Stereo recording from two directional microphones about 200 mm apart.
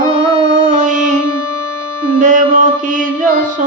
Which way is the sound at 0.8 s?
40° right (ahead or behind).